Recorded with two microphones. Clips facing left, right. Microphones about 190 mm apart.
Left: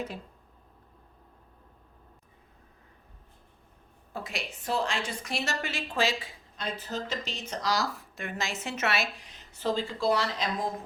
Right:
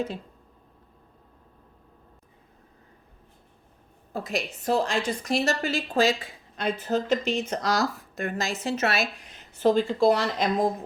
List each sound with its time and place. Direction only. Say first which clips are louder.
4.1 s a woman's voice: right 7 dB; 40° right (ahead or behind)
6.6 s speech: right 8 dB; 55° right (ahead or behind)